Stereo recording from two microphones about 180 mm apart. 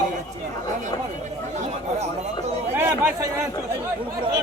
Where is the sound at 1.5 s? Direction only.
40° right (ahead or behind).